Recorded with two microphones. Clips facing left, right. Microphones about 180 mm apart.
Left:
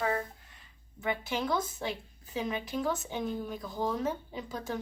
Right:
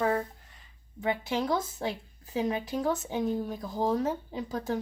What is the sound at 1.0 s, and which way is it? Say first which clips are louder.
Speech: right 3 dB; 30° right (ahead or behind).